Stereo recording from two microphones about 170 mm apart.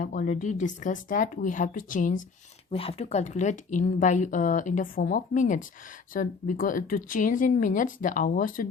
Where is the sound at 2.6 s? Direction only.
35° left (ahead or behind).